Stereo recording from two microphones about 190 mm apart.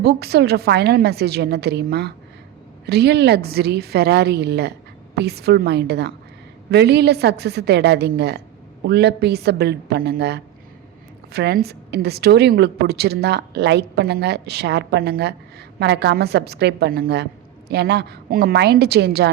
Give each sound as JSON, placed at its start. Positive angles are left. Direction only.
{"t": 0.0, "sound": "a woman's voice", "side_deg": -55}